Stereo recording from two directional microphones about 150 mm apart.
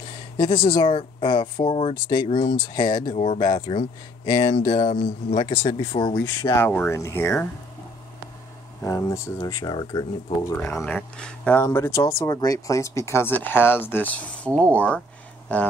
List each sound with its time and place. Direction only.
0.4 s speech: 35° left (ahead or behind)
4.9 s speech: 40° left (ahead or behind)
6.5 s speech: 15° left (ahead or behind)
8.8 s speech: 20° left (ahead or behind)
10.6 s speech: 15° left (ahead or behind)